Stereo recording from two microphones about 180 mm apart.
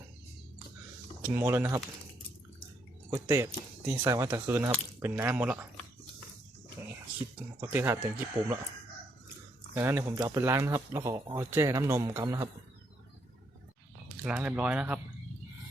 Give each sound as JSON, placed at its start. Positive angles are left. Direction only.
{"t": 1.2, "sound": "speech", "side_deg": -10}
{"t": 3.1, "sound": "speech", "side_deg": -15}
{"t": 7.6, "sound": "speech", "side_deg": -10}
{"t": 9.7, "sound": "speech", "side_deg": -15}
{"t": 14.3, "sound": "speech", "side_deg": -5}